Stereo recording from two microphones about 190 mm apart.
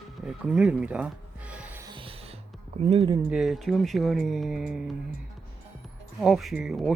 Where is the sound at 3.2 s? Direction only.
Centre (ahead or behind).